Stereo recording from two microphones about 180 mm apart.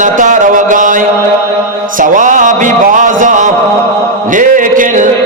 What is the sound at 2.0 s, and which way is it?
Music, 45° right (ahead or behind).